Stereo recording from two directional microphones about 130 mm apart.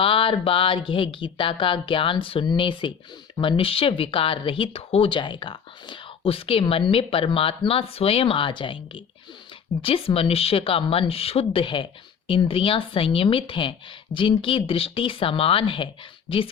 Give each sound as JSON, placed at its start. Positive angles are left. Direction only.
{"t": 0.0, "sound": "speech", "side_deg": 45}